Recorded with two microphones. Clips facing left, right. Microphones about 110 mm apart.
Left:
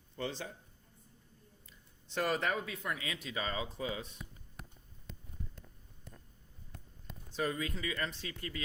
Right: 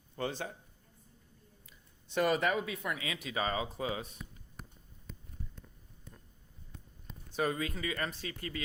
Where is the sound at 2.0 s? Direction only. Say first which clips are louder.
Right 4 dB; 10° right (ahead or behind).